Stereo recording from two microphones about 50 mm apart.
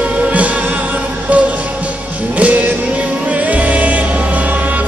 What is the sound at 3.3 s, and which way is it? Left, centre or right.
Music, right.